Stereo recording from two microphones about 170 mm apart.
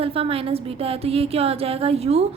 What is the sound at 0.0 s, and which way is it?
A woman's voice, 35° right (ahead or behind).